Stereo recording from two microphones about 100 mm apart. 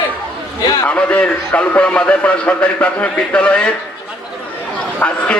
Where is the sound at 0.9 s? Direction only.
15° left (ahead or behind).